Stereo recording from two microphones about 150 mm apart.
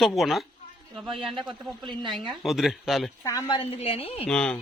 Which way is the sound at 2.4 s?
Centre (ahead or behind).